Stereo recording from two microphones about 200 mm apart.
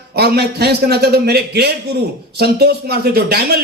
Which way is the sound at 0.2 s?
55° right (ahead or behind).